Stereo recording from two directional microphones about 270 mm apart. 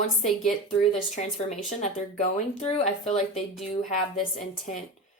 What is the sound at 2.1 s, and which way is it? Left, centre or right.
Speech, left.